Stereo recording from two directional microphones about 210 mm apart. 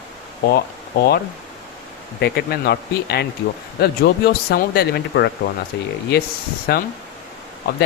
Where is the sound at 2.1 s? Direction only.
50° left (ahead or behind).